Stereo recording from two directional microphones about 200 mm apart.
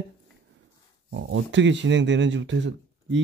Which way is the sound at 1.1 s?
65° right (ahead or behind).